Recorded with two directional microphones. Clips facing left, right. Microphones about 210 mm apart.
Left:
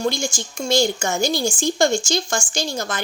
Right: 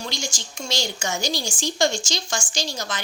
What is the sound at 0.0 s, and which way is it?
Speech, 50° left (ahead or behind).